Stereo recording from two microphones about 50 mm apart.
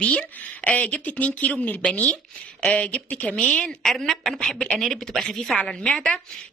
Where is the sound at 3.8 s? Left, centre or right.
Centre.